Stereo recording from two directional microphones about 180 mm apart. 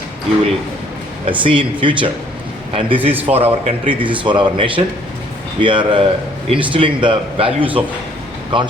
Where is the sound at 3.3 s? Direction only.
35° right (ahead or behind).